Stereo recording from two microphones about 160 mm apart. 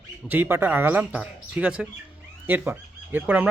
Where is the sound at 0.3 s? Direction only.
10° right (ahead or behind).